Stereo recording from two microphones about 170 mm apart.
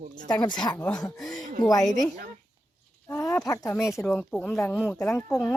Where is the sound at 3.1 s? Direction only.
15° left (ahead or behind).